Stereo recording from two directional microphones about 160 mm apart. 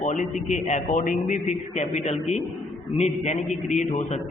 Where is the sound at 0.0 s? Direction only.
50° left (ahead or behind).